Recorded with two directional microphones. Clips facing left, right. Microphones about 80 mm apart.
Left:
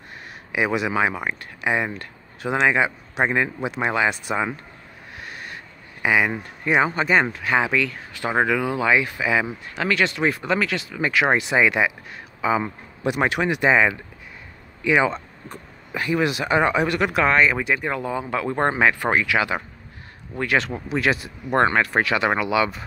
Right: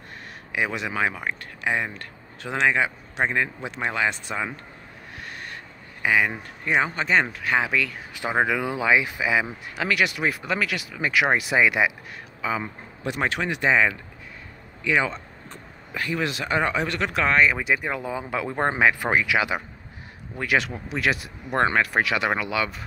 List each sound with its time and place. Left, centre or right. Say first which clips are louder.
0.5 s speech: left 5 dB; centre
5.2 s a sound: left 1 dB; centre
6.0 s speech: left 2 dB; centre
8.1 s speech: left 2 dB; centre
12.4 s speech: left 6 dB; centre